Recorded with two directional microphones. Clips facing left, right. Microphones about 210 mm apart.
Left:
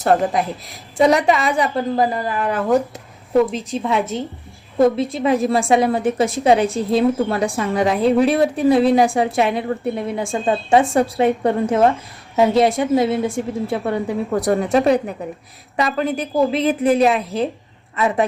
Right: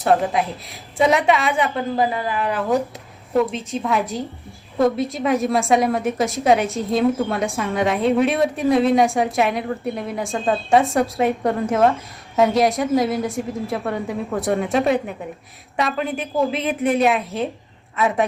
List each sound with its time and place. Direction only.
0.0 s a woman's voice: centre (ahead or behind)
5.0 s a woman's voice: centre (ahead or behind)
13.1 s a woman's voice: 30° left (ahead or behind)
13.3 s a woman's voice: centre (ahead or behind)